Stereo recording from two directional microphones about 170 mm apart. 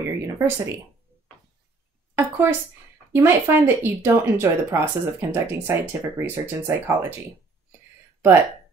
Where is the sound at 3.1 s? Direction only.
15° right (ahead or behind).